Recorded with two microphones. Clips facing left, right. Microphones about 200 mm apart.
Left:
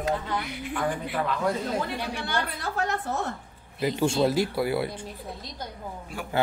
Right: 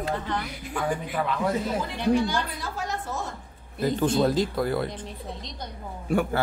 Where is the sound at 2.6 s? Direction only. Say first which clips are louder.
Left 3 dB; 65° left (ahead or behind).